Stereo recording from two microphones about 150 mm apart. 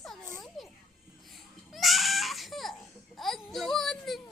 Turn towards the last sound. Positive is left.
turn(degrees=0)  # may be behind; listen again after turning